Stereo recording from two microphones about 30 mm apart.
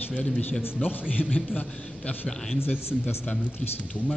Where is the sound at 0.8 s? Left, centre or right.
Left.